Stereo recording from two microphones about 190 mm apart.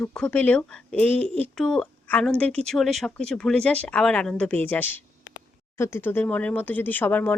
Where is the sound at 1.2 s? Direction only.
30° right (ahead or behind).